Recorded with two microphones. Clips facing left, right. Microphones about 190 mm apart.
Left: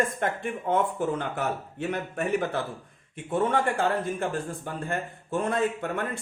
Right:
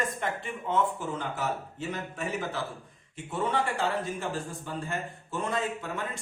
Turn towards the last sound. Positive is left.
turn(degrees=55)  # may be behind; listen again after turning